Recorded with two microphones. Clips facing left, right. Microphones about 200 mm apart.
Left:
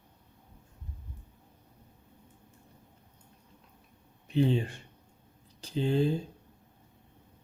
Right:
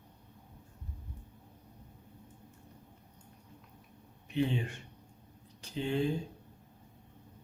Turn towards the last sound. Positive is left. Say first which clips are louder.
# left 4 dB
turn(degrees=35)  # may be behind; listen again after turning